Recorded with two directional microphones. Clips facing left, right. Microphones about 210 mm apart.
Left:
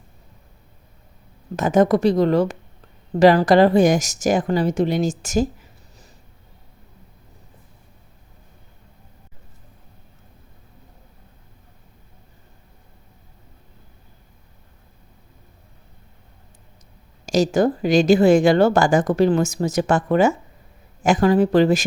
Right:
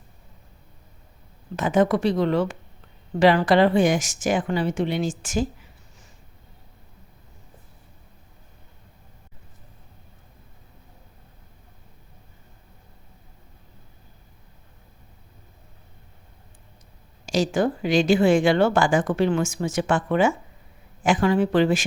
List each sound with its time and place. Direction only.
1.5 s speech: 40° left (ahead or behind)
17.2 s speech: 40° left (ahead or behind)